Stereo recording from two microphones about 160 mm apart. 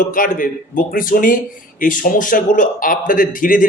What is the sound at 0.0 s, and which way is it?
A man's voice, 55° left (ahead or behind).